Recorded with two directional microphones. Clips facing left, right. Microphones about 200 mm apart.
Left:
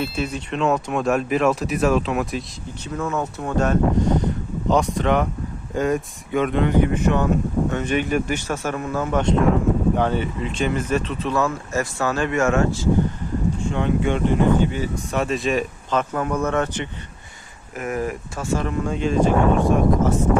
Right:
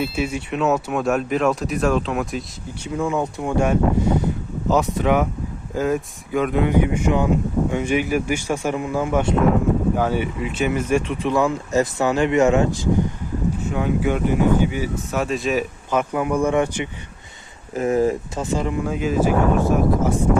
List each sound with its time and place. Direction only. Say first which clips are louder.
0.0 s speech: right 2 dB; 10° right (ahead or behind)
2.8 s speech: right 3 dB; 15° right (ahead or behind)
17.7 s speech: right 7 dB; 25° right (ahead or behind); by 20.1 s 5° right (ahead or behind)